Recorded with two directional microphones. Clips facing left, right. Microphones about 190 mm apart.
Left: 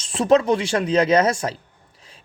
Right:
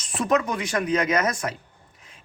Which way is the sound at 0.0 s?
30° left (ahead or behind).